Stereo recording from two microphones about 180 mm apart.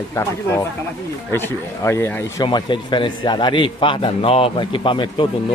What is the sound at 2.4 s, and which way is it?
A man's voice, 25° left (ahead or behind).